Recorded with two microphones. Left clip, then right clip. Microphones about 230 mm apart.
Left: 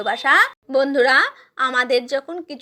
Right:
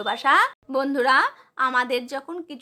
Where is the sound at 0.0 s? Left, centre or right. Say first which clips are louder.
Left 3 dB; centre.